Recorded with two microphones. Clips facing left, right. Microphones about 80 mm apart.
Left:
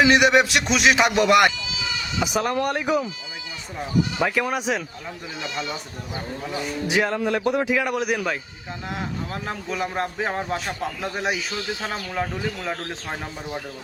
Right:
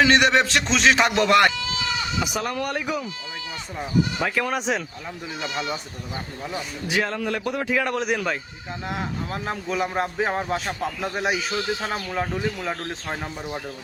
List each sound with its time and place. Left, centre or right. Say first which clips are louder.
0.0 s a man's voice: left 1 dB; centre
2.2 s a man's voice: left 4 dB; left
4.2 s speech: left 2 dB; centre
6.5 s a man's voice: left 3 dB; centre
7.8 s speech: even; centre